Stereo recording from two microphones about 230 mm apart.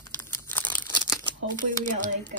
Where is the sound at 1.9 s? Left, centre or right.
Right.